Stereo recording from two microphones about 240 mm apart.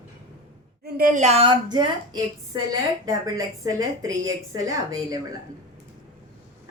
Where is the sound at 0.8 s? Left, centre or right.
Right; by 5.2 s centre.